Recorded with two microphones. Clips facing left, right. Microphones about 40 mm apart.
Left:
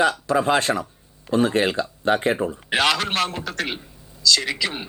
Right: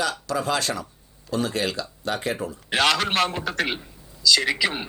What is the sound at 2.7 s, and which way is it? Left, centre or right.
A man's voice, centre.